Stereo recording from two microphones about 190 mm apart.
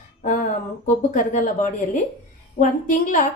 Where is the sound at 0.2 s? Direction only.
45° left (ahead or behind).